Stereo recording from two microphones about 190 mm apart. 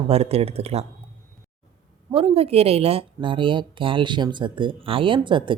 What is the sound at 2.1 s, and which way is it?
Speech, 30° right (ahead or behind).